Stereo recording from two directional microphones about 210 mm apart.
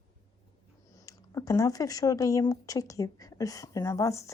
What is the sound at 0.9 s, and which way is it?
Speech, 15° left (ahead or behind).